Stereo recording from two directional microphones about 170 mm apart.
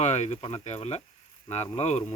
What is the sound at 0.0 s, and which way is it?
Speech, 40° left (ahead or behind).